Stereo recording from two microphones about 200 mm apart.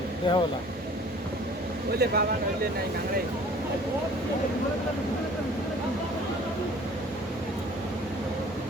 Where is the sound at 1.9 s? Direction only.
50° right (ahead or behind).